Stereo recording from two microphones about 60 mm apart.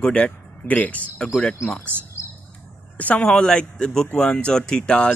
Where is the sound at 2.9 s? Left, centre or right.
Left.